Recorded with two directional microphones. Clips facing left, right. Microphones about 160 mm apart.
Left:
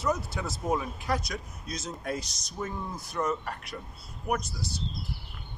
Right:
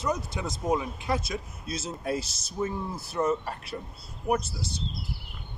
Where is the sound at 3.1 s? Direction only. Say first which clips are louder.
Right 4 dB; 25° right (ahead or behind).